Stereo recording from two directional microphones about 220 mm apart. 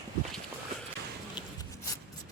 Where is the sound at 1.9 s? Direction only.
15° left (ahead or behind).